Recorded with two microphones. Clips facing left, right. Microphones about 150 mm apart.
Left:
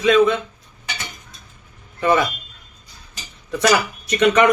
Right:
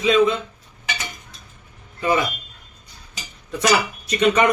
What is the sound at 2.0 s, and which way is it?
Speech, 65° left (ahead or behind).